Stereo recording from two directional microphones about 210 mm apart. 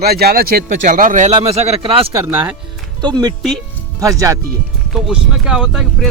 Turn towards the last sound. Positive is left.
turn(degrees=-5)  # may be behind; listen again after turning